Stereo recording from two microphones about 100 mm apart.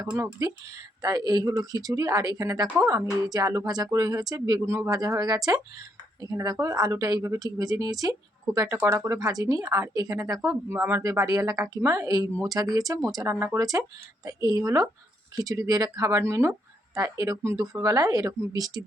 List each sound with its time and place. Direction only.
1.0 s speech: 40° right (ahead or behind)
2.6 s speech: 20° right (ahead or behind)
2.9 s speech: 35° right (ahead or behind)
13.1 s speech: 25° right (ahead or behind)
13.6 s speech: 35° right (ahead or behind)